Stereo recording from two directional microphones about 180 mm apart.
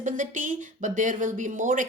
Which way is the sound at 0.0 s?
45° right (ahead or behind).